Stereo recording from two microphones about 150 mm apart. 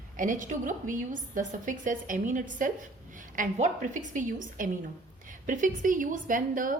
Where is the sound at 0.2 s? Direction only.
60° right (ahead or behind).